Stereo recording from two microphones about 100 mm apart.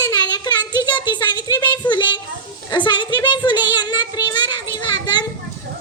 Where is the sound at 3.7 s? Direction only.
45° left (ahead or behind).